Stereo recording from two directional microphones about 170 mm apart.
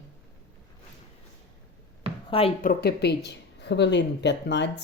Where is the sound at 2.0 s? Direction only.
30° right (ahead or behind).